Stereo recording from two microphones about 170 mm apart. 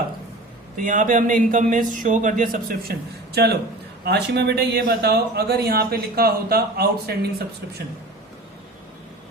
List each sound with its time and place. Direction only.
0.8 s a man's voice: 50° right (ahead or behind)
3.3 s speech: 75° right (ahead or behind)